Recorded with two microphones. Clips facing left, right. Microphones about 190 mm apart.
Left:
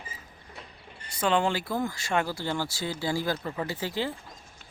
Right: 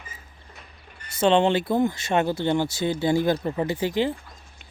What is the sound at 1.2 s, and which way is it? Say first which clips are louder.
Speech: right 7 dB; 25° right (ahead or behind).